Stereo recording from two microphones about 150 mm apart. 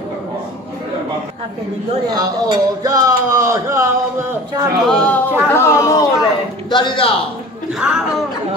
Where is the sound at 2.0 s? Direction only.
25° right (ahead or behind).